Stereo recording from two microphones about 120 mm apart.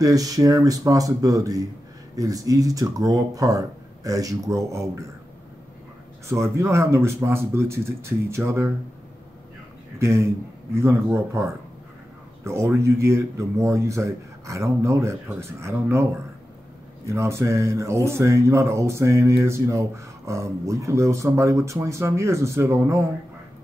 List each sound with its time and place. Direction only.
0.0 s speech: 30° right (ahead or behind)
6.2 s speech: 25° right (ahead or behind)
9.9 s speech: 25° right (ahead or behind)